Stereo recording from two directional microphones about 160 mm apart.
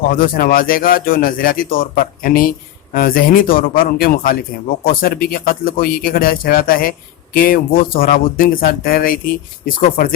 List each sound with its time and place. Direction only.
0.1 s speech: 60° left (ahead or behind)